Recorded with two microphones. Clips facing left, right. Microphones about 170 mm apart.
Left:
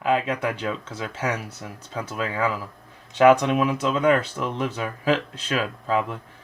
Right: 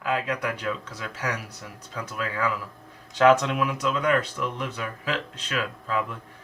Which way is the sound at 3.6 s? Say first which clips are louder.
Left 4 dB; 25° left (ahead or behind).